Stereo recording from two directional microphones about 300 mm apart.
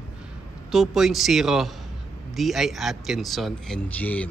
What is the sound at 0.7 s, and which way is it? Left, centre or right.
A man's voice, centre.